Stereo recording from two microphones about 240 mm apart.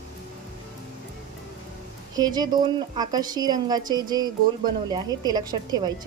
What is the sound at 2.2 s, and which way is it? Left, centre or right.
A woman's voice, centre.